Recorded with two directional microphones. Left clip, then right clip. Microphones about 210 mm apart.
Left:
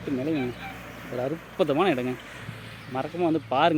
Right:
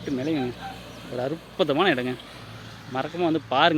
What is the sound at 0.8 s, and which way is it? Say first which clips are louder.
Bird: left 1 dB; 15° right (ahead or behind).